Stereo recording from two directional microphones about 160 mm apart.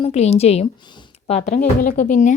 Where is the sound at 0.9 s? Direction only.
30° left (ahead or behind).